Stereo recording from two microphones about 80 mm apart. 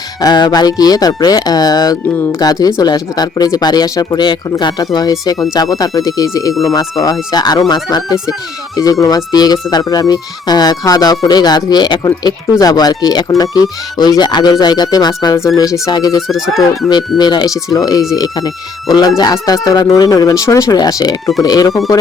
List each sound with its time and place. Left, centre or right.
0.2 s speech: left
4.2 s speech: left
6.5 s speech: centre
7.0 s speech: left
16.2 s speech: centre
17.2 s speech: left
20.7 s speech: left